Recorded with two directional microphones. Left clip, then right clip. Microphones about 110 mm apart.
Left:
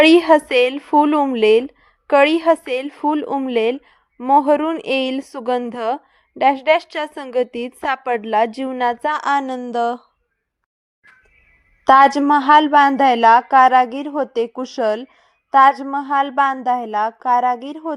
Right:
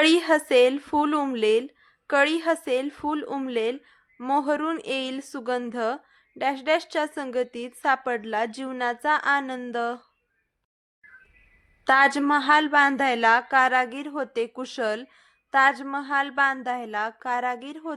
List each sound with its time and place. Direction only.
0.0 s a woman's voice: 30° left (ahead or behind)
4.2 s a woman's voice: 15° left (ahead or behind)
4.4 s a woman's voice: 25° left (ahead or behind)
9.1 s speech: 45° left (ahead or behind)
9.6 s speech: 30° left (ahead or behind)
11.9 s speech: 40° left (ahead or behind)